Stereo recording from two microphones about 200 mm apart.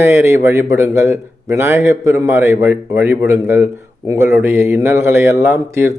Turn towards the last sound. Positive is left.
turn(degrees=-10)  # may be behind; listen again after turning